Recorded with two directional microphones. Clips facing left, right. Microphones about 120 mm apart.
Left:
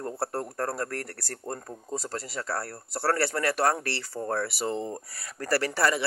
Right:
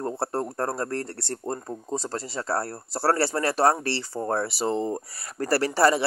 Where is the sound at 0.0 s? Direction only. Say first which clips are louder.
Right 4 dB; 25° right (ahead or behind).